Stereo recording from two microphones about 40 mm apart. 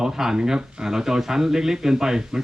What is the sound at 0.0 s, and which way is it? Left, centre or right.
Speech, centre.